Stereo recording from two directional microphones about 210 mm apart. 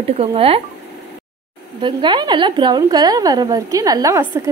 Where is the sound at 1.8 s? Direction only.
25° right (ahead or behind).